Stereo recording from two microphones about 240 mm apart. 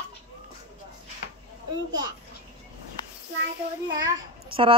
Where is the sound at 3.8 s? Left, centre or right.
Centre.